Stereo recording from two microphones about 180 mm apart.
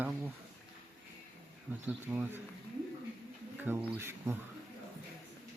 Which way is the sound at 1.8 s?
10° right (ahead or behind).